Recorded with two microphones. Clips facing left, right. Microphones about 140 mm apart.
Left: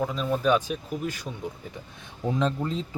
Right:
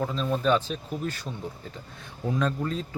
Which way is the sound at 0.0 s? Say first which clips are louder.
Left 1 dB; 5° left (ahead or behind).